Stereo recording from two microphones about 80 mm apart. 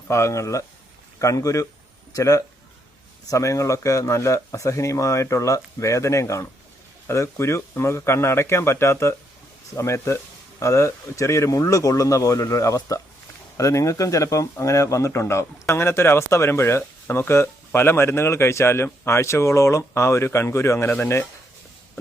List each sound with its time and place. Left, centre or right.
0.1 s speech: left